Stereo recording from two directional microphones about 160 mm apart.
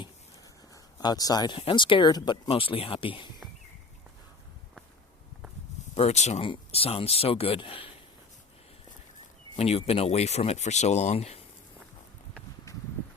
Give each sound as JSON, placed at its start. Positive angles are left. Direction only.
{"t": 0.7, "sound": "speech", "side_deg": 25}
{"t": 5.9, "sound": "speech", "side_deg": 40}
{"t": 9.6, "sound": "speech", "side_deg": 40}